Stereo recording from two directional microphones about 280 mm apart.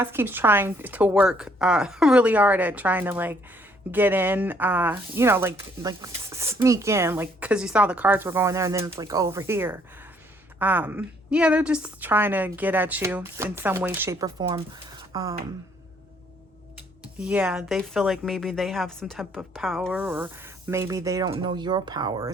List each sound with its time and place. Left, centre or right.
0.0 s speech: centre
17.2 s speech: centre